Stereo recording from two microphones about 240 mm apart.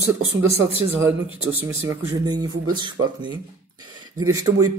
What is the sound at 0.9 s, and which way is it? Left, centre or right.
Speech, centre.